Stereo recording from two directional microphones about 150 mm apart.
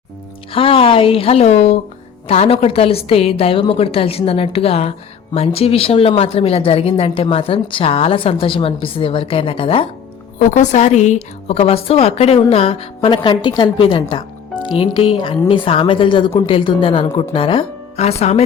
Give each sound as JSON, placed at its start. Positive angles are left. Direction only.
{"t": 0.5, "sound": "a woman's voice", "side_deg": 40}
{"t": 10.5, "sound": "a woman's voice", "side_deg": 55}